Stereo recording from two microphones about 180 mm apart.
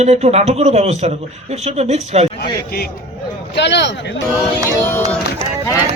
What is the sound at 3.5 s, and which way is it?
Speech, 75° left (ahead or behind).